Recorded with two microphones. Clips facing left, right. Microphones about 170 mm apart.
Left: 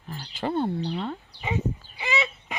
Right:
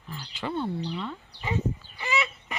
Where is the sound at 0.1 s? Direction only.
45° left (ahead or behind).